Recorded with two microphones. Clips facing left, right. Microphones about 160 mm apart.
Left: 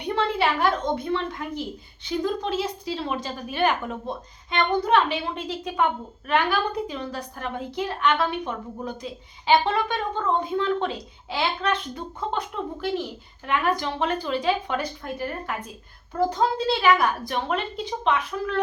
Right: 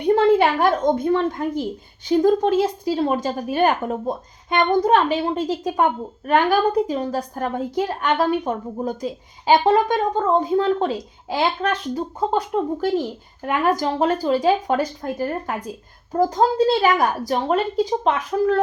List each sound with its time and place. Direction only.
0.0 s a woman's voice: 45° right (ahead or behind)